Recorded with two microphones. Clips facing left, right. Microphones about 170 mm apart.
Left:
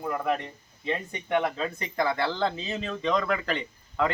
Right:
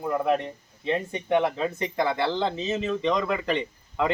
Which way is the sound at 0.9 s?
25° right (ahead or behind).